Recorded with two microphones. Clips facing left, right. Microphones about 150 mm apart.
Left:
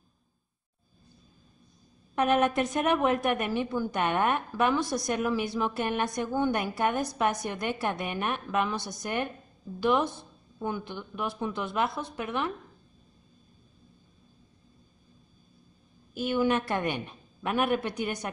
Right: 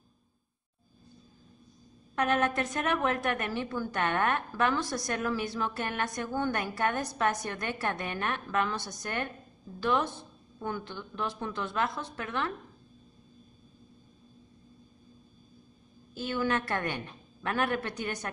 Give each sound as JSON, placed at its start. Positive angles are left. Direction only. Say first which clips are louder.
{"t": 2.1, "sound": "a woman's voice", "louder": "left 3 dB", "side_deg": 15}
{"t": 16.2, "sound": "a woman's voice", "louder": "left 4 dB", "side_deg": 15}